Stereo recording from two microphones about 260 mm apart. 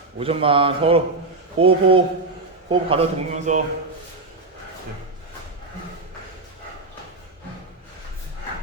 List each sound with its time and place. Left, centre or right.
0.2 s a man's voice: right